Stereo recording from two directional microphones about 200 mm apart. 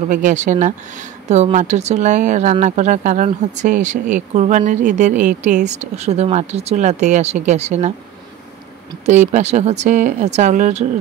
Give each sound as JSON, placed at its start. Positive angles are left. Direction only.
{"t": 0.1, "sound": "speech", "side_deg": -40}
{"t": 9.0, "sound": "speech", "side_deg": -35}